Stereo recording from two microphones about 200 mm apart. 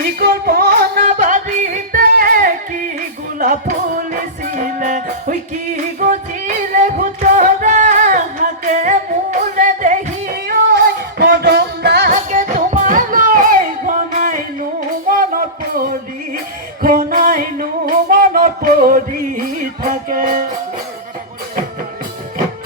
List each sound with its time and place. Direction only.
0.2 s music: 50° right (ahead or behind)
6.7 s singing: 40° right (ahead or behind); by 12.1 s 55° right (ahead or behind)
12.1 s a sound: 40° right (ahead or behind)
15.0 s music: 45° right (ahead or behind)